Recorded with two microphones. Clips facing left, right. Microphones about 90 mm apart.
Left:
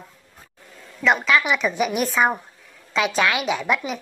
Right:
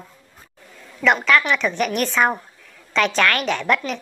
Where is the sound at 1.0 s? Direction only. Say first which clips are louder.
Right 2 dB; centre (ahead or behind).